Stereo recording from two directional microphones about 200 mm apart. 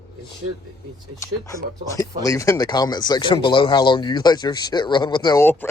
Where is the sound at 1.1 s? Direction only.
15° left (ahead or behind).